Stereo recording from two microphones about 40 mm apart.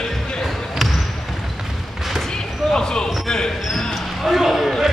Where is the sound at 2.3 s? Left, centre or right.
Centre.